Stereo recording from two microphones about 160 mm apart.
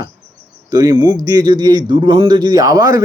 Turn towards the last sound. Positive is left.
turn(degrees=-20)  # may be behind; listen again after turning